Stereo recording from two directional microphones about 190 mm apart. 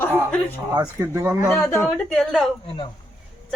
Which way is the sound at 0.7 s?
15° right (ahead or behind).